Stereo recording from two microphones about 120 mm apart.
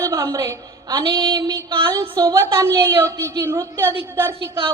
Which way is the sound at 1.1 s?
40° right (ahead or behind).